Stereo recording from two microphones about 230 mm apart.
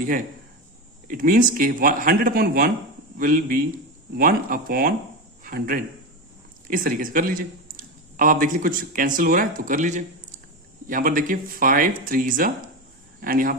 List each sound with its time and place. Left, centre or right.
1.0 s speech: right